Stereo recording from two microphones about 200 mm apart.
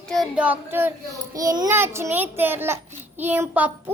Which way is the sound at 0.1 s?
5° right (ahead or behind).